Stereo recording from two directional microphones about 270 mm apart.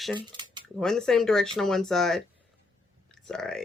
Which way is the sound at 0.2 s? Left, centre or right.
Centre.